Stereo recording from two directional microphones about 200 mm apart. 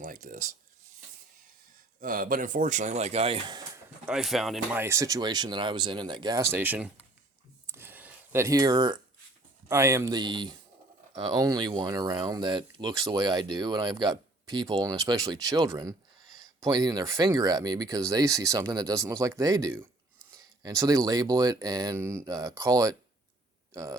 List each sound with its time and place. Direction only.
0.0 s a sound: 40° right (ahead or behind)
2.0 s speech: 45° right (ahead or behind); by 3.6 s 25° right (ahead or behind)
4.0 s speech: centre (ahead or behind)
4.8 s speech: 15° right (ahead or behind)
7.7 s a sound: 10° right (ahead or behind)
9.6 s speech: 15° right (ahead or behind)